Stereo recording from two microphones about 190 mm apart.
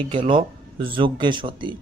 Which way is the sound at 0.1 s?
25° right (ahead or behind).